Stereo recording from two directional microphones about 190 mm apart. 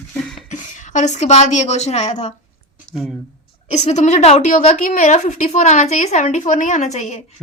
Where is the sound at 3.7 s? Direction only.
40° left (ahead or behind).